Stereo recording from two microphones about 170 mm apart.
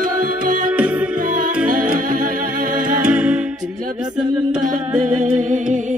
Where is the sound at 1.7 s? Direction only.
55° right (ahead or behind).